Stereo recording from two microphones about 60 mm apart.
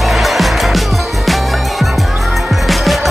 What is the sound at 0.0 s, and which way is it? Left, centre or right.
Music, centre.